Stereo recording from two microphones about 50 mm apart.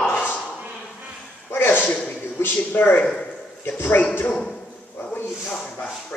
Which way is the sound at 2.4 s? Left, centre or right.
Left.